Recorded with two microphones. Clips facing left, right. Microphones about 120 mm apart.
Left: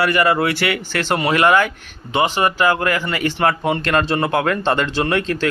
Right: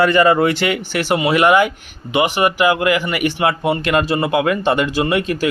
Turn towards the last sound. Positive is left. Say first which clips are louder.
# right 1 dB
turn(degrees=-10)  # may be behind; listen again after turning